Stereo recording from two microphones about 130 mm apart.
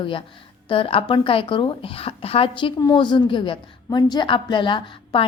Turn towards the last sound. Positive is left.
turn(degrees=40)  # may be behind; listen again after turning